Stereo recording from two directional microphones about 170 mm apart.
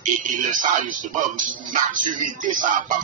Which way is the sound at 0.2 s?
50° right (ahead or behind).